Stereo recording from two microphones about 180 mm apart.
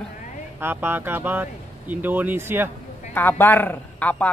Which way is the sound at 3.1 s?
10° left (ahead or behind).